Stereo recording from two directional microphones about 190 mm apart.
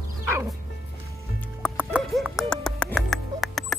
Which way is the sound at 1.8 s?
5° right (ahead or behind).